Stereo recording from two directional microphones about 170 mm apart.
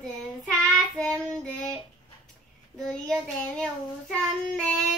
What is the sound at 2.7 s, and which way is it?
Child singing, 5° left (ahead or behind).